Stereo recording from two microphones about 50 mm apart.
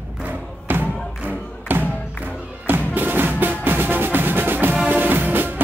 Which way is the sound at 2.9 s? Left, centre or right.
Right.